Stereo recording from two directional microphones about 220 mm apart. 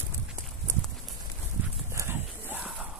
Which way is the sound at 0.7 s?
10° right (ahead or behind).